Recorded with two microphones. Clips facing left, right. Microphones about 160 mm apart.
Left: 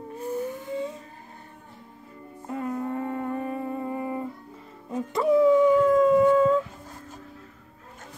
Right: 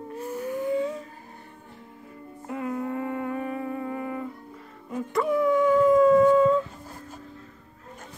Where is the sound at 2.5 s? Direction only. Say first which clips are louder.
Even; 35° left (ahead or behind).